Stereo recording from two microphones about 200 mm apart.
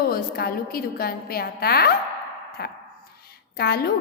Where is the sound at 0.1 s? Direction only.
50° left (ahead or behind).